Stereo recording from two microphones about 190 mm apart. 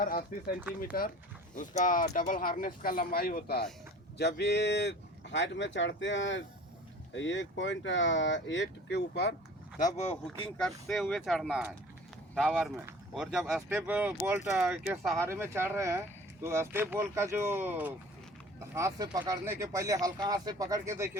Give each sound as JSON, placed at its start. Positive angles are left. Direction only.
{"t": 0.0, "sound": "speech", "side_deg": 50}
{"t": 9.8, "sound": "speech", "side_deg": 35}
{"t": 10.6, "sound": "speech", "side_deg": 0}